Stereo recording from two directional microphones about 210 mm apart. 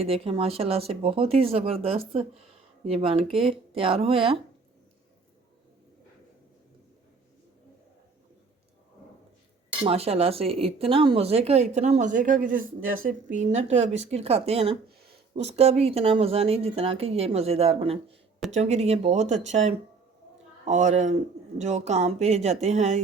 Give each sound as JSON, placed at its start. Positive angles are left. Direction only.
{"t": 0.0, "sound": "speech", "side_deg": -30}
{"t": 9.8, "sound": "speech", "side_deg": -30}